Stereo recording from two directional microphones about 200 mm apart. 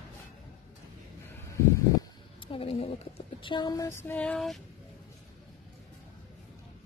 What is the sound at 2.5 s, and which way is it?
Speech, 30° left (ahead or behind).